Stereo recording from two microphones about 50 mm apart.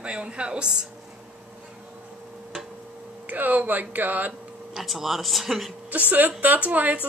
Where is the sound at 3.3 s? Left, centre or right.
Right.